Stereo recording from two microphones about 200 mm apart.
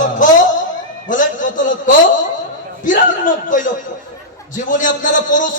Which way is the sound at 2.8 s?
40° left (ahead or behind).